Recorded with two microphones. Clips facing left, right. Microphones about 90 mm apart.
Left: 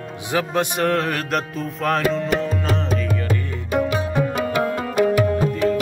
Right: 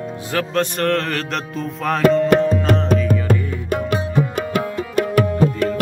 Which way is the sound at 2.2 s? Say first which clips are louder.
Right 6 dB; 60° right (ahead or behind).